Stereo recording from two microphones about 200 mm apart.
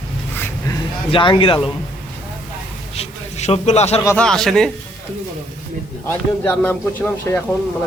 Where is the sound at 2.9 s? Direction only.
30° left (ahead or behind).